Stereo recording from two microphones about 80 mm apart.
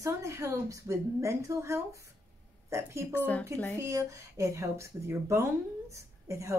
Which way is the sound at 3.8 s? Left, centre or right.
Right.